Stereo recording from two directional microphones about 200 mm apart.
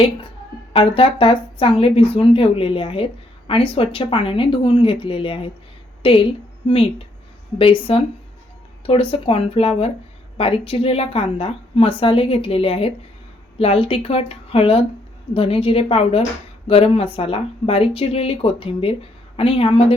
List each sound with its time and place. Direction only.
0.7 s a woman's voice: 25° left (ahead or behind)